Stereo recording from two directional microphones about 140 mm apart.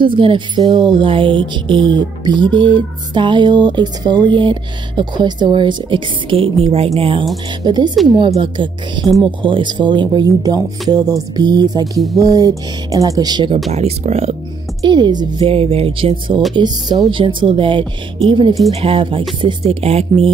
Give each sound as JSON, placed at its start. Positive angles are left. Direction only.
{"t": 0.0, "sound": "speech", "side_deg": -35}
{"t": 7.6, "sound": "speech", "side_deg": -30}
{"t": 13.7, "sound": "speech", "side_deg": -50}
{"t": 14.9, "sound": "speech", "side_deg": -30}